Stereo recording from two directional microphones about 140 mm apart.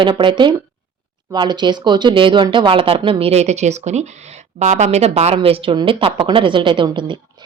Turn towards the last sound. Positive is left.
turn(degrees=-35)  # may be behind; listen again after turning